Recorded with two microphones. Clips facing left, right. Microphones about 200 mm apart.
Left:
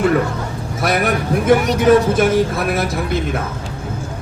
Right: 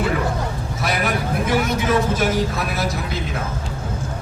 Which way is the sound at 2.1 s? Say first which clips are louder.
Left 6 dB; 55° left (ahead or behind).